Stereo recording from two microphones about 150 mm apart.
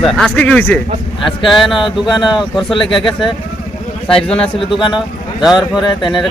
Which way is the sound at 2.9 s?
Centre (ahead or behind).